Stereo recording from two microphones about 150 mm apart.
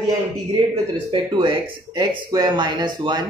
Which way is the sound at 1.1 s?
35° right (ahead or behind).